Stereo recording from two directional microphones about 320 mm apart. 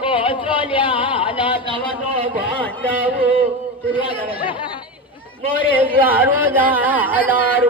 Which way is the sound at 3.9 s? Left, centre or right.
Centre.